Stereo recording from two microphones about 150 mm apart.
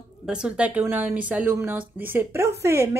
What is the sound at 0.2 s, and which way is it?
A woman's voice, 5° right (ahead or behind).